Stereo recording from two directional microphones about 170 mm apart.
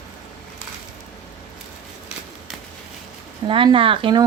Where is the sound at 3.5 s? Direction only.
30° right (ahead or behind).